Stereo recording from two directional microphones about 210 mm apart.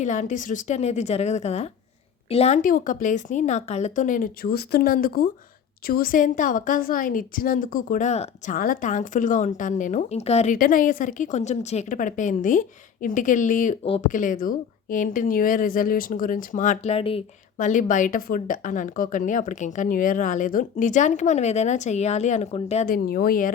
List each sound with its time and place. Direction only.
0.0 s speech: 35° left (ahead or behind)
13.8 s speech: 25° left (ahead or behind)
14.1 s speech: 40° left (ahead or behind)
23.0 s speech: 45° left (ahead or behind)